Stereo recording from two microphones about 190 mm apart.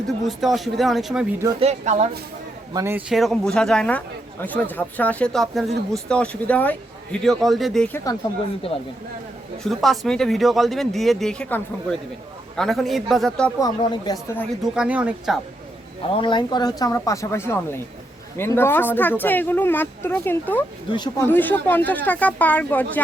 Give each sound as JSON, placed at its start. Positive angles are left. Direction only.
{"t": 0.3, "sound": "a man's voice", "side_deg": 0}
{"t": 1.5, "sound": "a woman's voice", "side_deg": -35}
{"t": 2.7, "sound": "a man's voice", "side_deg": -15}
{"t": 3.1, "sound": "a man's voice", "side_deg": 0}
{"t": 8.1, "sound": "speech", "side_deg": 15}
{"t": 8.7, "sound": "speech", "side_deg": 30}
{"t": 9.6, "sound": "a man's voice", "side_deg": 0}
{"t": 13.6, "sound": "speech", "side_deg": 20}
{"t": 14.6, "sound": "a man's voice", "side_deg": -5}
{"t": 16.1, "sound": "speech", "side_deg": 25}
{"t": 20.9, "sound": "speech", "side_deg": 20}
{"t": 21.2, "sound": "speech", "side_deg": 10}